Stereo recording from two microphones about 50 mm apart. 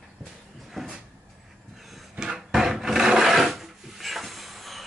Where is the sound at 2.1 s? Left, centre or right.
Centre.